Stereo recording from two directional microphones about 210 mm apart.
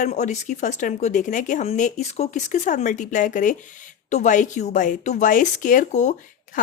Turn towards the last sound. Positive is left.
turn(degrees=35)  # may be behind; listen again after turning